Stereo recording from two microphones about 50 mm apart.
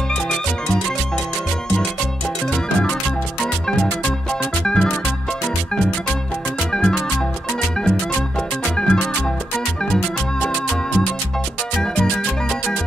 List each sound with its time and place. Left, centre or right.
2.5 s music: centre
4.6 s music: centre
6.7 s music: centre
8.7 s music: centre
10.4 s music: centre